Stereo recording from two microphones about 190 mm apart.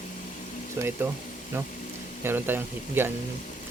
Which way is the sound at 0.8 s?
10° right (ahead or behind).